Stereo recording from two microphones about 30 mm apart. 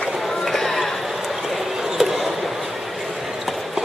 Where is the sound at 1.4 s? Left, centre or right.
Centre.